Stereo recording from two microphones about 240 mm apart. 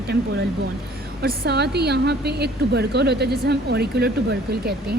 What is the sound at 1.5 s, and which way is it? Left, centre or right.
A woman's voice, right.